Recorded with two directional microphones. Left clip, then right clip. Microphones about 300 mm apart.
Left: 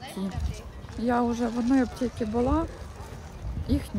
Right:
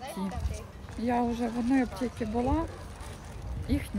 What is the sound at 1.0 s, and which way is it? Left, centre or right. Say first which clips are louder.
Speech: left 3 dB; centre.